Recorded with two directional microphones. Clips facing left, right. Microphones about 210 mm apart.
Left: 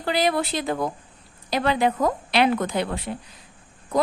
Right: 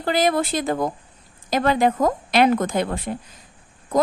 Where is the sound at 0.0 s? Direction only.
45° right (ahead or behind).